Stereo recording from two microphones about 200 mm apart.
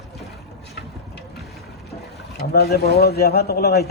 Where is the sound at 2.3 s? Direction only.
55° left (ahead or behind).